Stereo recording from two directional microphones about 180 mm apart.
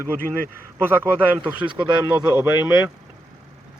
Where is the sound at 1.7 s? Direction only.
25° right (ahead or behind).